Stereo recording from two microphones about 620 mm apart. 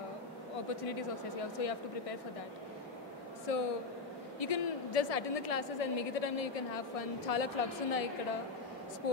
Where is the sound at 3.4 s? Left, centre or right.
Left.